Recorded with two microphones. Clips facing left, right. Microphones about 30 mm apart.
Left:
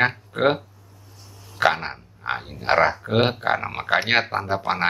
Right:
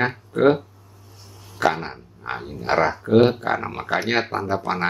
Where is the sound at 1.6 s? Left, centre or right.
Left.